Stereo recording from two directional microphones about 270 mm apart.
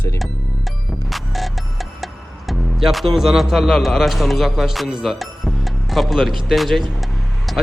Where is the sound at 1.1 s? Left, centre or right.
Centre.